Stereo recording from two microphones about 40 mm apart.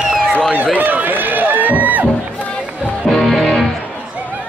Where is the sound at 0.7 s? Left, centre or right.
Right.